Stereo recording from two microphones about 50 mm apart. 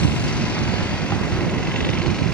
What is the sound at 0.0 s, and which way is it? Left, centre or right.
Vehicle, left.